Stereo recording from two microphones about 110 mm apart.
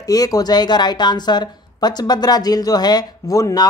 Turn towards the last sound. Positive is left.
turn(degrees=30)  # may be behind; listen again after turning